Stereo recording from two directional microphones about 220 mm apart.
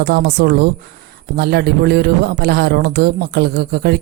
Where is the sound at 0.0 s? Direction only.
45° right (ahead or behind).